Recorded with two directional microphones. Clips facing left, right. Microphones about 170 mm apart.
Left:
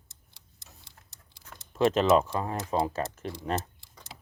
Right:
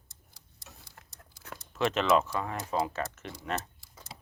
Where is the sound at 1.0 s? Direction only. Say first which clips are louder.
Right 4 dB; 75° right (ahead or behind).